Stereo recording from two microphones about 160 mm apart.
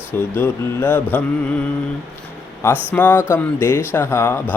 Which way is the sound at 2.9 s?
10° left (ahead or behind).